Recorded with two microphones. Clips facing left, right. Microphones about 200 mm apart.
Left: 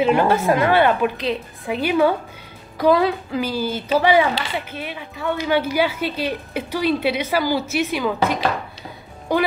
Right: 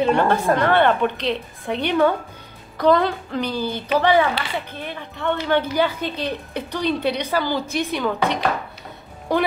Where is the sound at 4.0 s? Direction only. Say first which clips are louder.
Left 1 dB; 10° left (ahead or behind).